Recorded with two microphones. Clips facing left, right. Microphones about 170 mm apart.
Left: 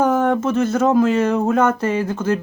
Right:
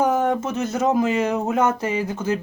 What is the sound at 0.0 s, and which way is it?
Speech, 15° right (ahead or behind).